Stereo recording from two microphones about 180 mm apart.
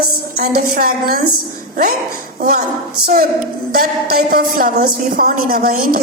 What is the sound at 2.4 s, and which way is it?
Speech, 55° right (ahead or behind).